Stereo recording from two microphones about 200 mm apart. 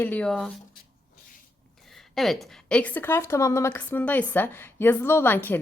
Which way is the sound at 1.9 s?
Centre (ahead or behind).